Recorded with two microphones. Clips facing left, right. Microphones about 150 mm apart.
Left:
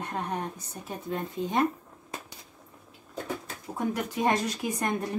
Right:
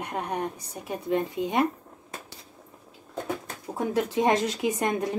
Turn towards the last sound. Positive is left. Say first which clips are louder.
# right 4 dB
turn(degrees=-20)  # may be behind; listen again after turning